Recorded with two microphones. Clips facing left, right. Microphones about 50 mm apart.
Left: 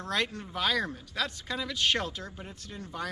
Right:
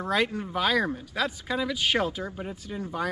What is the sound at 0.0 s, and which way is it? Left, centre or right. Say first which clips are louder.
Speech: right 5 dB; centre.